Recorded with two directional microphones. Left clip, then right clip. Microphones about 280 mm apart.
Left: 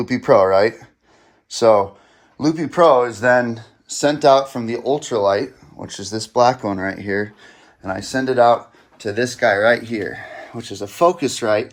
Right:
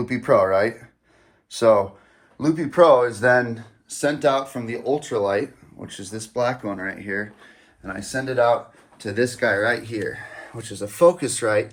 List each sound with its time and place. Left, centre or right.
0.0 s speech: centre